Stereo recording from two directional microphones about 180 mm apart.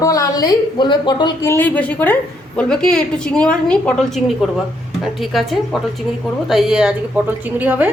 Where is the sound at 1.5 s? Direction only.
10° left (ahead or behind).